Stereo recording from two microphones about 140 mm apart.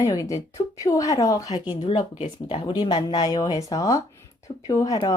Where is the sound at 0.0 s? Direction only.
25° left (ahead or behind).